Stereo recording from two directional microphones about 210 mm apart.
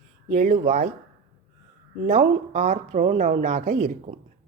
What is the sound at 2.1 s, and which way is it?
A woman's voice, 35° right (ahead or behind).